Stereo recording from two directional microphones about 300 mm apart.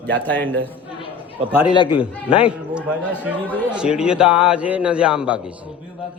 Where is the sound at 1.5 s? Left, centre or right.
Centre.